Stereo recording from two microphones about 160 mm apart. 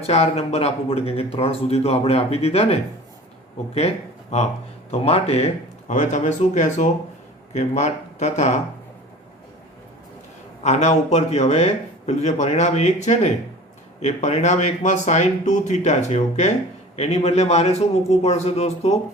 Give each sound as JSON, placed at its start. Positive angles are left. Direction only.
{"t": 0.1, "sound": "speech", "side_deg": 40}
{"t": 3.8, "sound": "a man's voice", "side_deg": 45}
{"t": 10.6, "sound": "a man's voice", "side_deg": 45}